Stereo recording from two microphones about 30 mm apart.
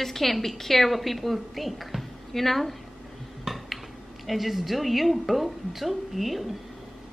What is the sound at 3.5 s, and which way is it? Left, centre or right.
Dishes, centre.